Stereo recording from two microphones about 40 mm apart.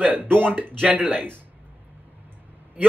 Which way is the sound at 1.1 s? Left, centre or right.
Right.